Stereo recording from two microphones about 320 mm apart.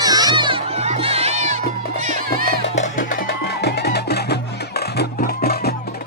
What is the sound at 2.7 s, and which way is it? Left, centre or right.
Music, left.